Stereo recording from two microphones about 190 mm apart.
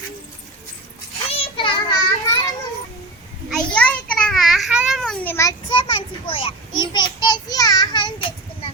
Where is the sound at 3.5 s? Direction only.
5° left (ahead or behind).